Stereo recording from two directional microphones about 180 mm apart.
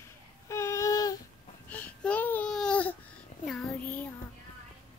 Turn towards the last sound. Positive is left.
turn(degrees=5)  # may be behind; listen again after turning